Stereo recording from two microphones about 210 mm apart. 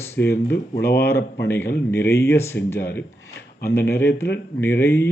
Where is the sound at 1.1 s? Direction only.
50° left (ahead or behind).